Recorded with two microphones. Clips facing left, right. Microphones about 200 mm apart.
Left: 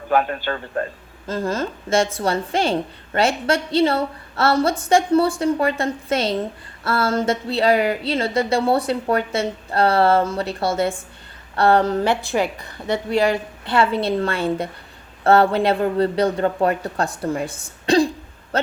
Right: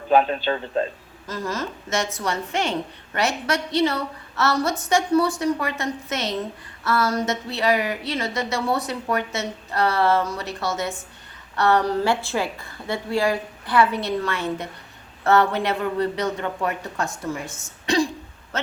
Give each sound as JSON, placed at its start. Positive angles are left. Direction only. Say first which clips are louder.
{"t": 0.1, "sound": "a man's voice", "louder": "right 1 dB", "side_deg": -20}
{"t": 1.3, "sound": "a woman's voice", "louder": "left 5 dB", "side_deg": 30}